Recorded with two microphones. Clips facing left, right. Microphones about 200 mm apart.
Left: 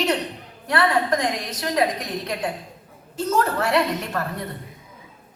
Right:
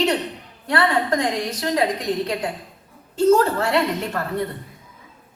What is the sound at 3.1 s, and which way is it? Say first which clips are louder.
Chuckle: right 6 dB; 25° right (ahead or behind).